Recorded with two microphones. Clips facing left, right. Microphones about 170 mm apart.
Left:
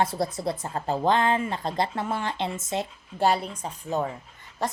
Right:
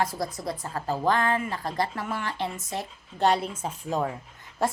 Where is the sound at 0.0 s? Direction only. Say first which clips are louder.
Left 3 dB; 25° left (ahead or behind).